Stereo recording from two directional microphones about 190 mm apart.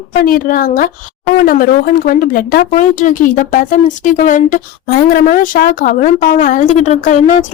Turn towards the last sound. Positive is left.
turn(degrees=40)  # may be behind; listen again after turning